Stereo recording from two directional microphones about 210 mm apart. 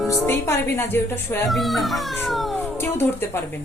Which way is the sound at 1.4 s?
Centre (ahead or behind).